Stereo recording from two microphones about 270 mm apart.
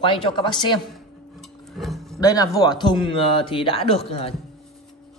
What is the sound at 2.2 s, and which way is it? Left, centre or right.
Speech, centre.